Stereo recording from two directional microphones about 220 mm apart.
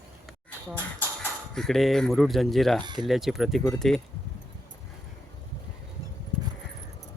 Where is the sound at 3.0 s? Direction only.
Centre (ahead or behind).